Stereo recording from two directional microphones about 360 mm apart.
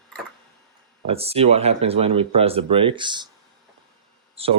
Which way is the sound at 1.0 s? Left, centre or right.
Centre.